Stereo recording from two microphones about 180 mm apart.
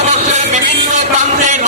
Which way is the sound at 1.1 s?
45° right (ahead or behind).